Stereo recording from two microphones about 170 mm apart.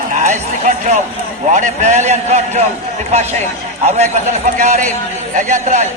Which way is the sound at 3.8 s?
40° right (ahead or behind).